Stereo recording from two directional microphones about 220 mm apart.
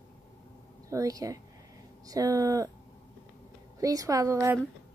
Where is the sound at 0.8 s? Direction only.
15° right (ahead or behind).